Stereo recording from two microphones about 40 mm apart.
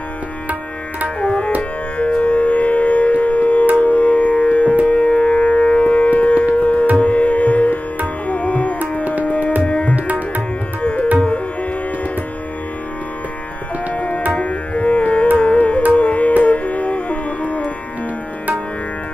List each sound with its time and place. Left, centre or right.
1.2 s tabla: left
1.6 s music: left
9.6 s tabla: left
9.9 s tabla: right
10.8 s music: left
13.9 s tabla: left
14.4 s music: left